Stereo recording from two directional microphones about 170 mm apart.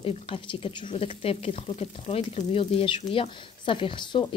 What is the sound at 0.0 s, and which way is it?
Speech, 35° left (ahead or behind).